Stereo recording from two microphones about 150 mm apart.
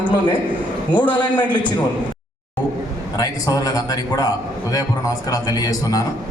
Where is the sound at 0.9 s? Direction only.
10° left (ahead or behind).